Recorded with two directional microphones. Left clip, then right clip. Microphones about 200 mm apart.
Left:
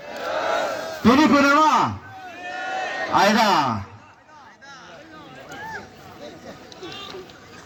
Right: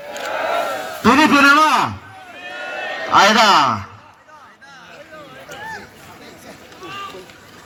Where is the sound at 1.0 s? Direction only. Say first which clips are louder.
Right 5 dB; 40° left (ahead or behind).